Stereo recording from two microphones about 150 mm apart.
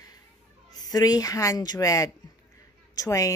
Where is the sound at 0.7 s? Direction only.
25° left (ahead or behind).